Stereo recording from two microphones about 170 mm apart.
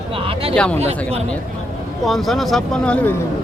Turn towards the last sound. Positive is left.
turn(degrees=10)  # may be behind; listen again after turning